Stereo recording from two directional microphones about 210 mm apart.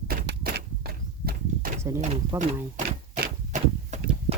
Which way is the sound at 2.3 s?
35° right (ahead or behind).